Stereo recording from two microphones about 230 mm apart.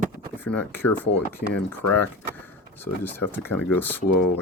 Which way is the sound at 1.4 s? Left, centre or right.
Left.